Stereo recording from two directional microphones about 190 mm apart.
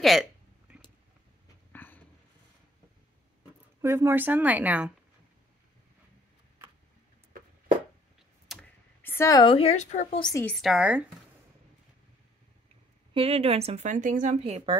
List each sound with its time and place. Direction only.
0.0 s a sound: centre (ahead or behind)
1.7 s a sound: 10° left (ahead or behind)
3.8 s speech: 15° right (ahead or behind)
8.5 s tick-tock: centre (ahead or behind)
9.1 s a woman's voice: 15° left (ahead or behind); by 10.2 s 35° left (ahead or behind)
10.4 s speech: centre (ahead or behind)
13.1 s a woman's voice: 30° right (ahead or behind)